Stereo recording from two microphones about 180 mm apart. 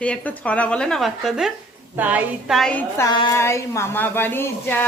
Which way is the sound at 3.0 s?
25° left (ahead or behind).